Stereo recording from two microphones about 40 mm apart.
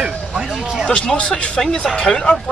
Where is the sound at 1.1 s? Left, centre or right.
Left.